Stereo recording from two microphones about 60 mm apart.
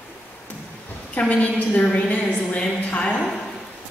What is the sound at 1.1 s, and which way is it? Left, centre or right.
A woman's voice, left.